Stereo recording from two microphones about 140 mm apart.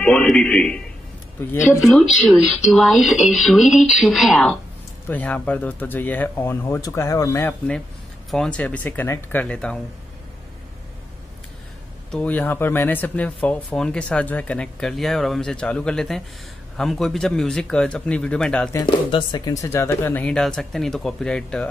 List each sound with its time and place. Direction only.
0.0 s speech: 5° left (ahead or behind)
1.8 s speech: centre (ahead or behind); by 7.5 s 20° left (ahead or behind)
8.3 s speech: 5° left (ahead or behind)
12.1 s speech: 10° left (ahead or behind)
18.9 s speech: 40° left (ahead or behind); by 21.6 s 5° left (ahead or behind)